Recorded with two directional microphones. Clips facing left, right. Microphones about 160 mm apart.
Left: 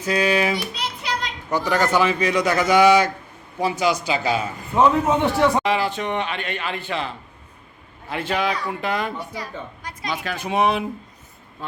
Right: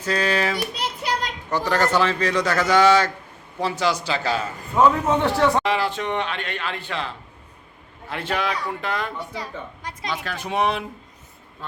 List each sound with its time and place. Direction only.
0.0 s a man's voice: 10° left (ahead or behind)
5.6 s speech: centre (ahead or behind)
8.1 s speech: centre (ahead or behind)
9.1 s a woman's voice: 25° right (ahead or behind)
10.2 s speech: centre (ahead or behind)